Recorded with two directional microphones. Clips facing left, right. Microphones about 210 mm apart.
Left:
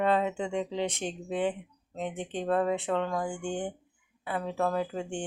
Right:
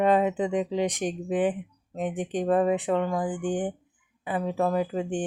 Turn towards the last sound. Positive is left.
turn(degrees=-15)  # may be behind; listen again after turning